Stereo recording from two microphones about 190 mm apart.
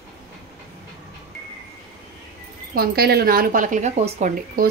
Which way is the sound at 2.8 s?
55° right (ahead or behind).